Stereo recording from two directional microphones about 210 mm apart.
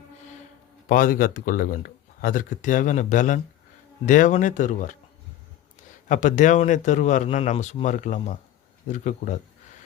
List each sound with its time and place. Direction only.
0.9 s speech: 40° left (ahead or behind)
6.1 s speech: 35° left (ahead or behind)